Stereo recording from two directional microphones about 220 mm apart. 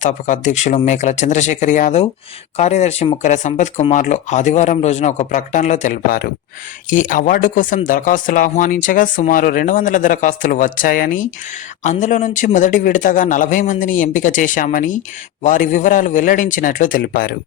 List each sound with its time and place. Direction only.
0.0 s speech: 35° left (ahead or behind)